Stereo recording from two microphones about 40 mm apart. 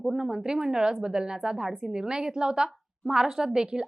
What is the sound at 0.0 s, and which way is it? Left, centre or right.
Speech, centre.